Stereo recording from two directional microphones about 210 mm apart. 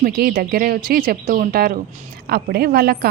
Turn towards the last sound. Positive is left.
turn(degrees=-45)  # may be behind; listen again after turning